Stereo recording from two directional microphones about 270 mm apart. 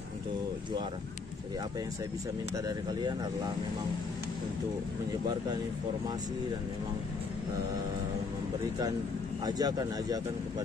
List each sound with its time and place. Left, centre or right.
2.5 s speech: centre
9.4 s speech: centre